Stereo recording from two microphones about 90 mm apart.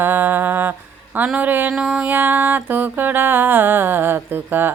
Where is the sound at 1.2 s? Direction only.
15° right (ahead or behind).